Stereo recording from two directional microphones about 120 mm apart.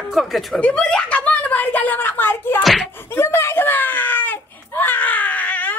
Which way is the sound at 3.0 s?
20° left (ahead or behind).